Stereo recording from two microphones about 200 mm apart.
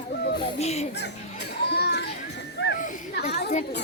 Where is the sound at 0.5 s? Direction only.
30° left (ahead or behind).